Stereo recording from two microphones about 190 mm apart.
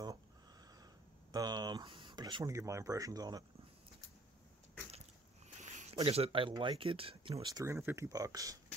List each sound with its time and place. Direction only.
1.3 s speech: 20° right (ahead or behind)
5.6 s speech: 35° right (ahead or behind); by 8.5 s 20° right (ahead or behind)